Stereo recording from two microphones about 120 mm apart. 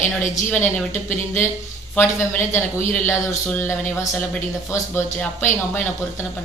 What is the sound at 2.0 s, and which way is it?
A man's voice, 15° left (ahead or behind).